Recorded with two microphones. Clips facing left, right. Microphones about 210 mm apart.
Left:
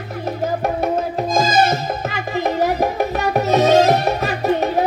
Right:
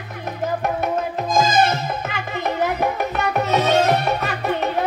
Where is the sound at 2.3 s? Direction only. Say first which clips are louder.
Left 4 dB; 35° left (ahead or behind).